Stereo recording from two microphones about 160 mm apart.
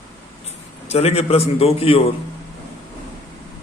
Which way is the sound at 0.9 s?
40° left (ahead or behind).